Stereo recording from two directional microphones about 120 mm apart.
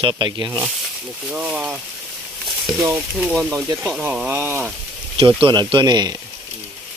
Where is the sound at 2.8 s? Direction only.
25° right (ahead or behind).